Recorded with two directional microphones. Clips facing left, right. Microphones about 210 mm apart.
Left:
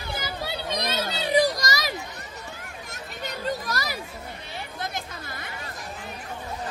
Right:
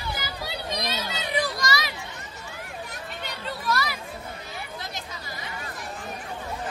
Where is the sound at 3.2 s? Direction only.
40° left (ahead or behind).